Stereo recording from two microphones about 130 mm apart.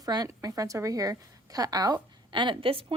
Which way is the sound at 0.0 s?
30° right (ahead or behind).